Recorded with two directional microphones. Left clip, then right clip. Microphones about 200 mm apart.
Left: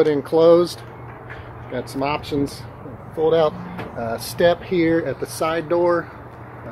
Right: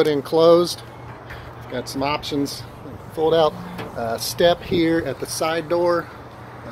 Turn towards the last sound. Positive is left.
turn(degrees=0)  # may be behind; listen again after turning